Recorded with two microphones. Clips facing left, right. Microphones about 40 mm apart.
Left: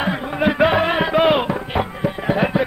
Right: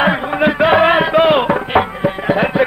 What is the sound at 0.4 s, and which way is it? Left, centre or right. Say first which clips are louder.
Music: right 4 dB; centre.